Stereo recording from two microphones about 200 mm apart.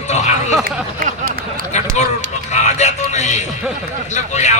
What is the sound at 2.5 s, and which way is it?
Music, 35° left (ahead or behind).